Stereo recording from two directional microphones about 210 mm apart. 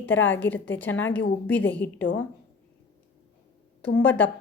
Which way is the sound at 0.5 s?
10° left (ahead or behind).